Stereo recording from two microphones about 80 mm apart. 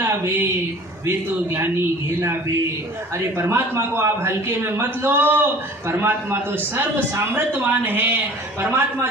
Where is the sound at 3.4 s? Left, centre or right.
Right.